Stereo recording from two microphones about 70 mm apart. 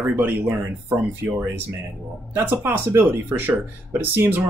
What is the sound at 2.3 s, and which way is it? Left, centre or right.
Speech, right.